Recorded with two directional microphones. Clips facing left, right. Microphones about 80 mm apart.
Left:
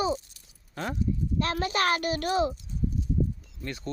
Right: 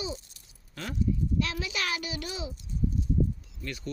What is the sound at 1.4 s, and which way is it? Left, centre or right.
A child's voice, left.